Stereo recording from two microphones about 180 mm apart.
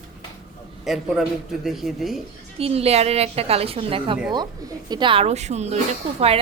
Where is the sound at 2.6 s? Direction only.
35° right (ahead or behind).